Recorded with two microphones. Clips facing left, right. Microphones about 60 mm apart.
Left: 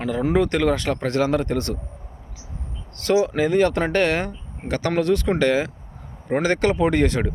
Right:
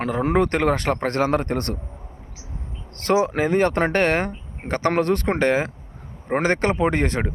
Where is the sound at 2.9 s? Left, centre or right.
Right.